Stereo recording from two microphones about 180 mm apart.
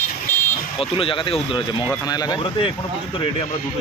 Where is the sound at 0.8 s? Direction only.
30° left (ahead or behind).